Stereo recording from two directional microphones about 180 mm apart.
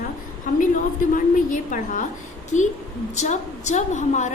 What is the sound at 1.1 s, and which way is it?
A woman's voice, 45° left (ahead or behind).